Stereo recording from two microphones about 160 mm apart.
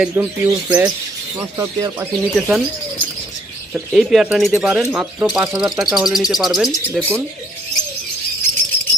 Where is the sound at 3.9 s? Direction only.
Centre (ahead or behind).